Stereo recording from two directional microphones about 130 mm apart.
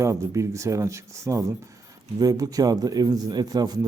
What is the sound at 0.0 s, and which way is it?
A man's voice, 25° right (ahead or behind).